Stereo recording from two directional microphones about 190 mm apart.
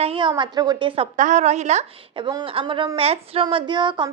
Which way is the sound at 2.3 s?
20° right (ahead or behind).